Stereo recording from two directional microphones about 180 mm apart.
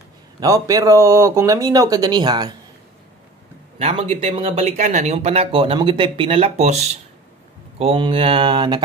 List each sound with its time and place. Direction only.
0.4 s speech: 20° right (ahead or behind)
3.7 s speech: 35° right (ahead or behind)